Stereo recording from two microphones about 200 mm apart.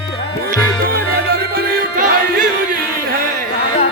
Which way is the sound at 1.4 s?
50° right (ahead or behind).